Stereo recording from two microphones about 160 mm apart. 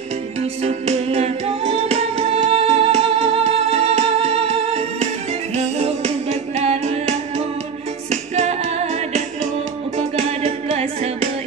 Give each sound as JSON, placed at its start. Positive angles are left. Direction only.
{"t": 0.6, "sound": "music", "side_deg": -40}